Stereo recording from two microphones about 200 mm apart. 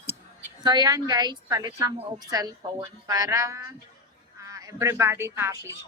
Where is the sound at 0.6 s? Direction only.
20° right (ahead or behind).